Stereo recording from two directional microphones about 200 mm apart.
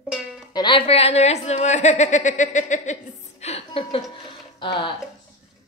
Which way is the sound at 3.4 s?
30° left (ahead or behind).